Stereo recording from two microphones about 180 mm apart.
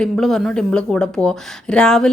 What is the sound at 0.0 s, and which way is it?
Speech, centre (ahead or behind).